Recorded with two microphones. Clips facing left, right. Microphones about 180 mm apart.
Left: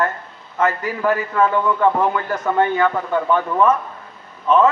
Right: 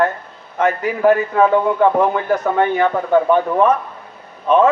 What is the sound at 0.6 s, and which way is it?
Speech, 65° right (ahead or behind).